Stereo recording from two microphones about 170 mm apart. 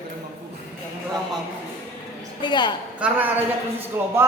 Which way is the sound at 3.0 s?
10° right (ahead or behind).